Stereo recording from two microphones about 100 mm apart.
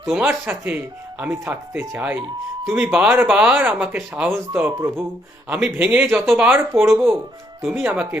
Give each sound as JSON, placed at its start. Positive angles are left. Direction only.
{"t": 0.0, "sound": "speech", "side_deg": -5}
{"t": 0.3, "sound": "speech", "side_deg": -20}
{"t": 5.5, "sound": "speech", "side_deg": -10}